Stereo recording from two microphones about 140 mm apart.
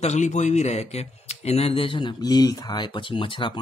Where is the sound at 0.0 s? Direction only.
55° left (ahead or behind).